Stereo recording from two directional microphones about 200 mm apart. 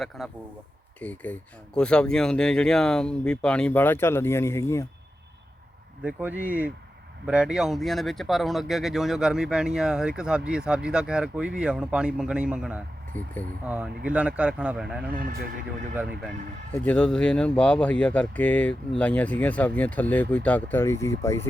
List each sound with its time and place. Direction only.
0.2 s speech: centre (ahead or behind)
6.0 s speech: 5° right (ahead or behind)
13.2 s speech: 10° left (ahead or behind)
13.7 s speech: 5° right (ahead or behind)
15.1 s speech: 45° right (ahead or behind)
16.7 s speech: 5° left (ahead or behind)